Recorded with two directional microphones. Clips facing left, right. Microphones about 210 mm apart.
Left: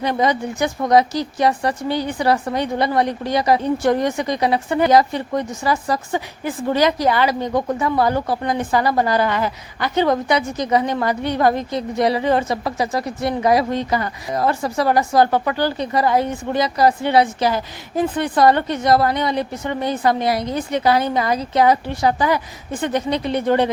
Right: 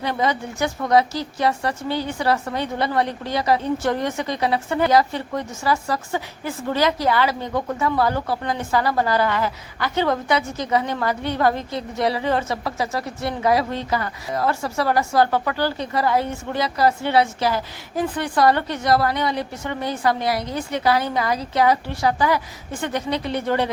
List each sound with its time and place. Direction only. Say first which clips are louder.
0.0 s a woman's voice: left 4 dB; 15° left (ahead or behind)